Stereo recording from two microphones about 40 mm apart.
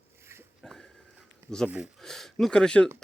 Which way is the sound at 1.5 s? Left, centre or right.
Centre.